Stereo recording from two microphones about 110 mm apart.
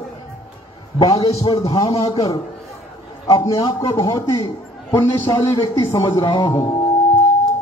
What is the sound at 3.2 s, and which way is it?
A man's voice, 30° left (ahead or behind).